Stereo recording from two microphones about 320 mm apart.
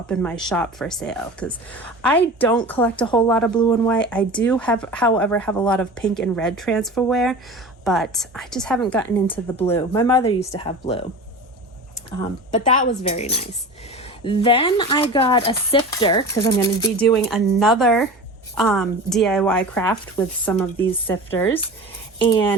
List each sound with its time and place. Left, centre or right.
0.1 s speech: centre
13.0 s speech: centre